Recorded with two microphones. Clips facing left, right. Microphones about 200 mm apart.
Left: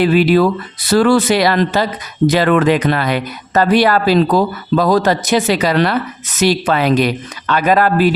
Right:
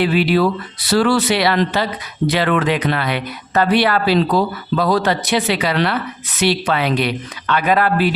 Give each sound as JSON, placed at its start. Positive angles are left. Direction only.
{"t": 0.0, "sound": "speech", "side_deg": 45}